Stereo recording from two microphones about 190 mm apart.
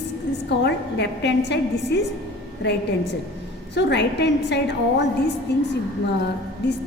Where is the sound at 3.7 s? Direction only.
65° left (ahead or behind).